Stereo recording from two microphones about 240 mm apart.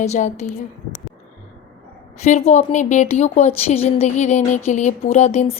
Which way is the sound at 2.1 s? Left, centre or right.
Left.